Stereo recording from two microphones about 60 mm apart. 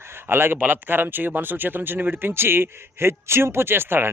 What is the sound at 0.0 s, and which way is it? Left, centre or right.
Speech, right.